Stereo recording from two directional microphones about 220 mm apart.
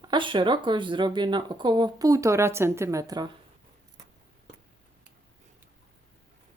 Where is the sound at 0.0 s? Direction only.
20° right (ahead or behind).